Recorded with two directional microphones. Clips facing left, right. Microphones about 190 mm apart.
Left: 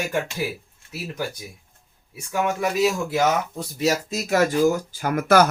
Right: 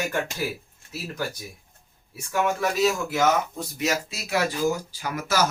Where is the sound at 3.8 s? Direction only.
40° left (ahead or behind); by 5.4 s 55° left (ahead or behind).